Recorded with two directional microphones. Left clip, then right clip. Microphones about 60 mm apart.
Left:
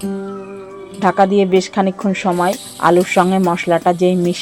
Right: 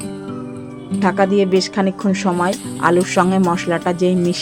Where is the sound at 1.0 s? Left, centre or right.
Centre.